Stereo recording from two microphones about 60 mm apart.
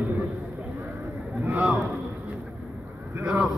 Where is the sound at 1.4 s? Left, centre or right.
Right.